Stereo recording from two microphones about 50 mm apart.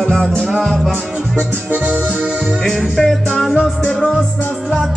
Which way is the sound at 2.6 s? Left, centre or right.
Centre.